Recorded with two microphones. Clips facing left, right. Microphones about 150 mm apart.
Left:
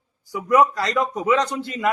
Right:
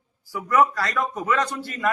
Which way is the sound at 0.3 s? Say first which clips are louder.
Left 3 dB; 15° left (ahead or behind).